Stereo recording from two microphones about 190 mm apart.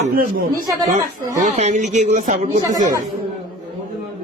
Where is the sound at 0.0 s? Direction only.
45° right (ahead or behind).